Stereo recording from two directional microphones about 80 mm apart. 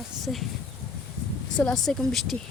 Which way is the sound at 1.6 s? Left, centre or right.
Centre.